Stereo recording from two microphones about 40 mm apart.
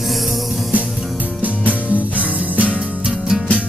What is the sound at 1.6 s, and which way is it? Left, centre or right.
Music, left.